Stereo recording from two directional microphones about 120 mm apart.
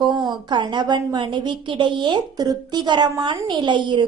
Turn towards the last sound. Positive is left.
turn(degrees=-40)  # may be behind; listen again after turning